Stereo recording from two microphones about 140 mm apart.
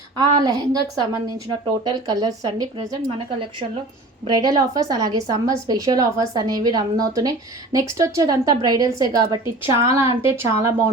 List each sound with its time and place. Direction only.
0.2 s a woman's voice: 25° right (ahead or behind)
4.3 s a woman's voice: 30° right (ahead or behind)